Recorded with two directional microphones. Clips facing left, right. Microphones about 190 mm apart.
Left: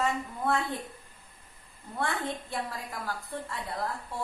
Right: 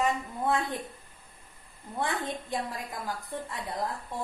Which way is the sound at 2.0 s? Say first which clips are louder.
Even; 15° right (ahead or behind).